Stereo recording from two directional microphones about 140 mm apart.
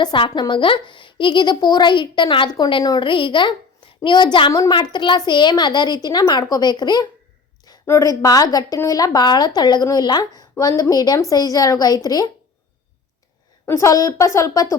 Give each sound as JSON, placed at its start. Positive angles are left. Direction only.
{"t": 0.0, "sound": "a woman's voice", "side_deg": 35}
{"t": 13.7, "sound": "a woman's voice", "side_deg": 20}